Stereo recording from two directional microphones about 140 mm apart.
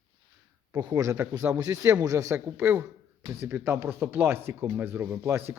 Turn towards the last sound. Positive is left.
turn(degrees=-15)  # may be behind; listen again after turning